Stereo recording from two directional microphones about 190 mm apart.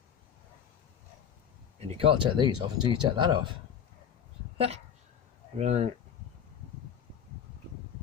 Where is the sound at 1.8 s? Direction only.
30° right (ahead or behind).